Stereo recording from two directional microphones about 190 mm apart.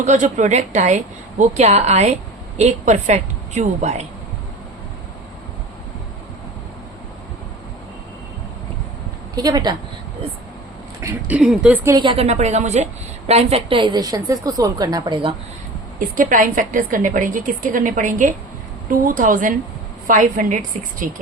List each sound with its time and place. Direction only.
0.0 s a woman's voice: 40° right (ahead or behind)
9.3 s speech: 20° right (ahead or behind)
11.0 s speech: 5° right (ahead or behind)
11.9 s a woman's voice: 25° right (ahead or behind)
16.0 s a woman's voice: 45° right (ahead or behind)